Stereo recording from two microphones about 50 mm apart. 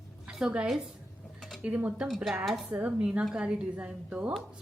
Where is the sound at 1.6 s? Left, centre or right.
Right.